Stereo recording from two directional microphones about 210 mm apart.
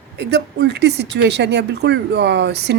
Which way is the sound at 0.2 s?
50° right (ahead or behind).